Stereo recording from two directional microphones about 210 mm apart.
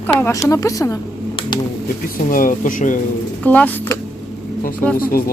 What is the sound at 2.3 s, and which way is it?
Speech, 40° left (ahead or behind).